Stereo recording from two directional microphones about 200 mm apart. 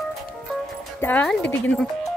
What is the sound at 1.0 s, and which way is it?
A woman's voice, 5° left (ahead or behind).